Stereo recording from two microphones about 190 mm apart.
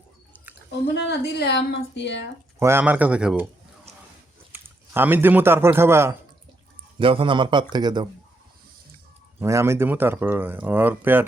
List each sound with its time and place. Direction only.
1.2 s a woman's voice: 60° left (ahead or behind)
2.6 s speech: 10° right (ahead or behind)
4.5 s a man's voice: 10° right (ahead or behind)
7.0 s a man's voice: 30° right (ahead or behind)
9.4 s speech: 15° right (ahead or behind)